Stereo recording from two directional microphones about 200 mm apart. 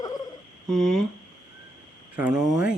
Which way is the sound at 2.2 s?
5° right (ahead or behind).